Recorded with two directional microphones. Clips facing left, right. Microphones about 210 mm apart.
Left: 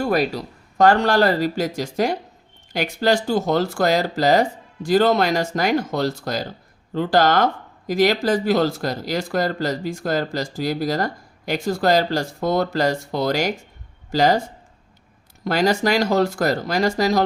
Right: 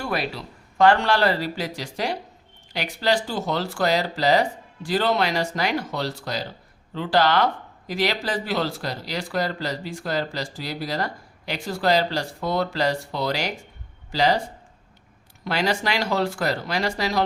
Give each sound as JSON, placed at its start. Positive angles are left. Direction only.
{"t": 0.0, "sound": "speech", "side_deg": 45}
{"t": 15.4, "sound": "speech", "side_deg": 45}